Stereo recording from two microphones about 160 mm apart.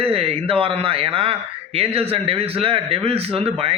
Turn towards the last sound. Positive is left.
turn(degrees=-40)  # may be behind; listen again after turning